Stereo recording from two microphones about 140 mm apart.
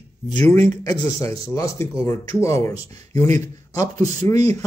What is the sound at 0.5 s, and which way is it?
A man's voice, 20° left (ahead or behind).